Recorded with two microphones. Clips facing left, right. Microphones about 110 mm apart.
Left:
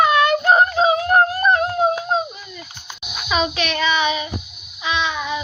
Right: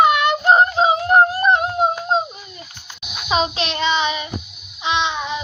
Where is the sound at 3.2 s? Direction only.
30° right (ahead or behind).